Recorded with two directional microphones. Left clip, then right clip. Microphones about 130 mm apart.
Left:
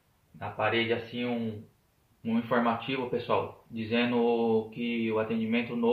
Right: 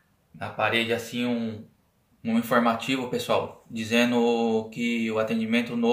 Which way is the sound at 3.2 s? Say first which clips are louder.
Right 4 dB; 30° right (ahead or behind).